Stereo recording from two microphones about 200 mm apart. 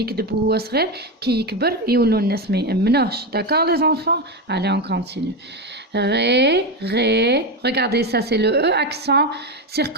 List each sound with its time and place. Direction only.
0.0 s a woman's voice: 50° right (ahead or behind)